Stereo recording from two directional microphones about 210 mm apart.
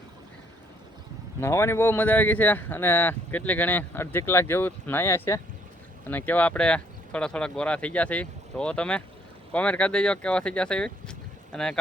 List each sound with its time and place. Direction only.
1.4 s speech: 10° left (ahead or behind)